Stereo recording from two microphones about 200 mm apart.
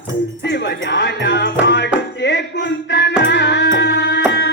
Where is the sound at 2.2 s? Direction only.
60° left (ahead or behind).